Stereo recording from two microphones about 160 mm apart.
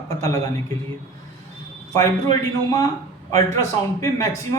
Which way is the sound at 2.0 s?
20° left (ahead or behind).